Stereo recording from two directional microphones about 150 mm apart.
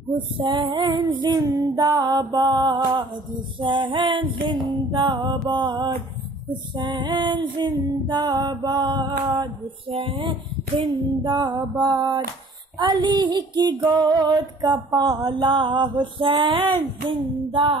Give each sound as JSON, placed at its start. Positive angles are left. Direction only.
{"t": 0.4, "sound": "music", "side_deg": -30}